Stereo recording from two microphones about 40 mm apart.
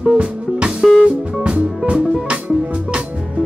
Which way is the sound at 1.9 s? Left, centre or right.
Right.